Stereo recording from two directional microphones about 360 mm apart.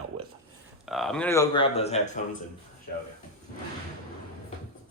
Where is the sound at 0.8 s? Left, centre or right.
Centre.